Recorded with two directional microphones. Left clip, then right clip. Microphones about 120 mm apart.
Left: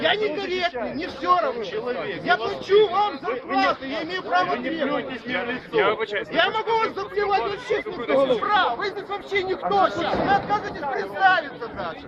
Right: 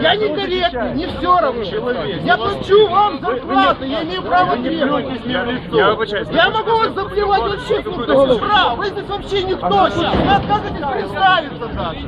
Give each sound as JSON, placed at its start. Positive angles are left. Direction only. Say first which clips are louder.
{"t": 0.0, "sound": "a man's voice", "louder": "right 7 dB", "side_deg": 20}
{"t": 7.4, "sound": "speech", "louder": "right 7 dB", "side_deg": 5}